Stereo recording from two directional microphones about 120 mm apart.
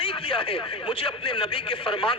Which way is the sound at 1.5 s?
50° left (ahead or behind).